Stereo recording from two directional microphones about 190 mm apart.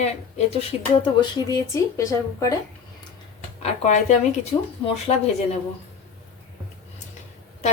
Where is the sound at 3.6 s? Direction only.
40° left (ahead or behind).